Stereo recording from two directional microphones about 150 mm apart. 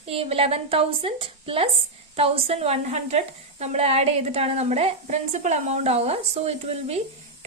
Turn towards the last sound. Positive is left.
turn(degrees=-45)  # may be behind; listen again after turning